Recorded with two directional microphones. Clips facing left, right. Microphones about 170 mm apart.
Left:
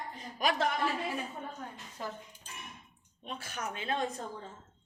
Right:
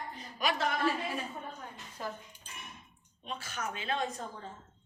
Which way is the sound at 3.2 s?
55° left (ahead or behind).